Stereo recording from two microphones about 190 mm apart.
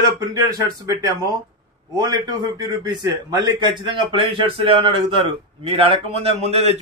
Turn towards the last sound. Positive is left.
turn(degrees=-35)  # may be behind; listen again after turning